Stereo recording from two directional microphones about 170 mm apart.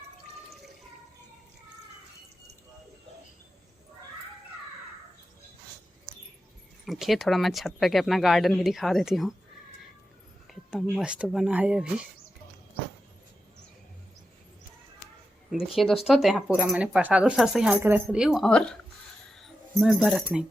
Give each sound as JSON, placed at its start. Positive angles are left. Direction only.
{"t": 6.8, "sound": "speech", "side_deg": 0}
{"t": 10.4, "sound": "a sound", "side_deg": 0}
{"t": 11.0, "sound": "speech", "side_deg": -5}
{"t": 15.4, "sound": "speech", "side_deg": 0}